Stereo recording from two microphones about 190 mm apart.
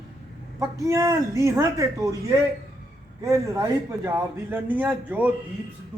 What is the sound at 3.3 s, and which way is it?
A man's voice, 15° right (ahead or behind).